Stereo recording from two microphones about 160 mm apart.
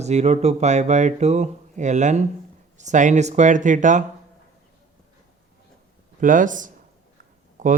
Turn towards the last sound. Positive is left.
turn(degrees=-55)  # may be behind; listen again after turning